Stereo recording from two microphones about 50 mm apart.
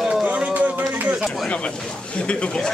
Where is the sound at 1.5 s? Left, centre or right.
Left.